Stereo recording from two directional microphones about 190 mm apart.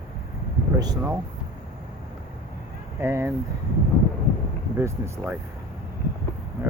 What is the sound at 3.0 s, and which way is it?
Speech, 15° right (ahead or behind).